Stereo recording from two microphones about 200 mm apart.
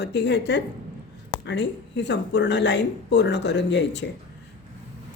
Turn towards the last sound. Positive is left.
turn(degrees=60)  # may be behind; listen again after turning